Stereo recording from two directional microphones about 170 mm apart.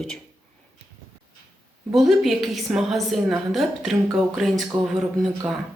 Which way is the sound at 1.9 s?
Centre (ahead or behind).